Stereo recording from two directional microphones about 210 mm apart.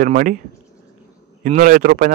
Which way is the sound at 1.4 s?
40° right (ahead or behind).